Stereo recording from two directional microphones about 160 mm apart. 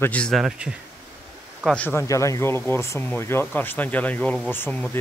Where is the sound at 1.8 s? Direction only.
15° left (ahead or behind).